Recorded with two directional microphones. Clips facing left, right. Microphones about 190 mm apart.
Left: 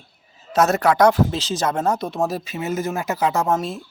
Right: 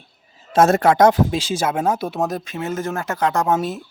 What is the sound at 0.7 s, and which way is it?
Speech, 25° right (ahead or behind).